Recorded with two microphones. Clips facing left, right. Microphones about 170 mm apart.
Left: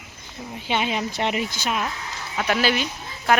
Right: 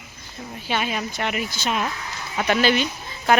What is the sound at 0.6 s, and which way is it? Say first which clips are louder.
Speech: left 1 dB; 20° left (ahead or behind).